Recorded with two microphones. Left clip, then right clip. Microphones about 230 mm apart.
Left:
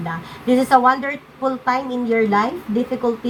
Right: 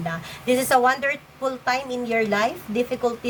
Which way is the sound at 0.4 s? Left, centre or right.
Right.